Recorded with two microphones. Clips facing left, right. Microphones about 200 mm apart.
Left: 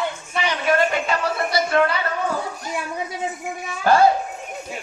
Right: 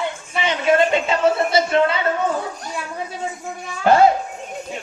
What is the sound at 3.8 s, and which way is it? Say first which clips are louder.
Speech: right 2 dB; 20° right (ahead or behind).